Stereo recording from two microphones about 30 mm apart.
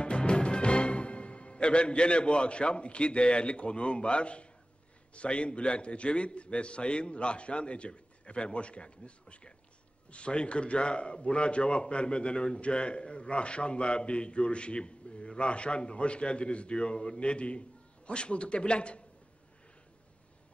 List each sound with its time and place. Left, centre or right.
0.0 s a man's voice: left